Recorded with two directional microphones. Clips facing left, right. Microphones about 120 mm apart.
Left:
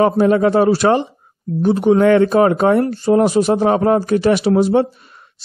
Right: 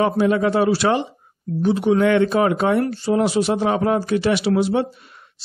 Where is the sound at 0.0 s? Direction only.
40° left (ahead or behind).